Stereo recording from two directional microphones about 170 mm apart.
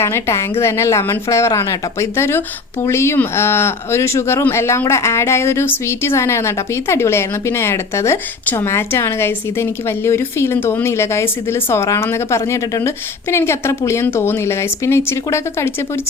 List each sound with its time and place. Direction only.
0.0 s speech: 15° left (ahead or behind)